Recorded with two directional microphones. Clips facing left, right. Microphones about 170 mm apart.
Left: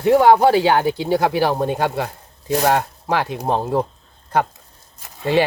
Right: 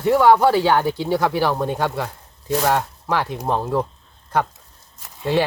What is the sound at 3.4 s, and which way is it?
Speech, 25° left (ahead or behind).